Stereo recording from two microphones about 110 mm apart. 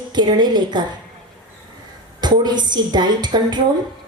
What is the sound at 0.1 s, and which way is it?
Speech, 40° right (ahead or behind).